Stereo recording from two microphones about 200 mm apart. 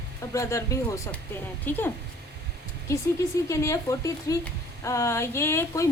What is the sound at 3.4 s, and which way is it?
Speech, 15° left (ahead or behind).